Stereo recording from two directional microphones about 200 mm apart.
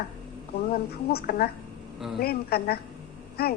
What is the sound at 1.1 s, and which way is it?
A woman's voice, 50° left (ahead or behind).